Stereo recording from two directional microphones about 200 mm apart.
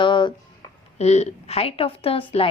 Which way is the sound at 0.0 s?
25° left (ahead or behind).